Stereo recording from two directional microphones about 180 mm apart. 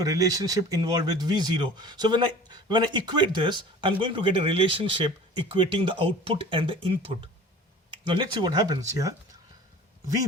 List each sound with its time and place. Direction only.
0.0 s speech: 20° right (ahead or behind)
7.9 s speech: 25° right (ahead or behind)